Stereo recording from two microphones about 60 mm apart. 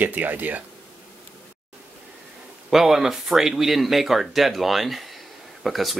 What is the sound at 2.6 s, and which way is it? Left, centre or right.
Speech, centre.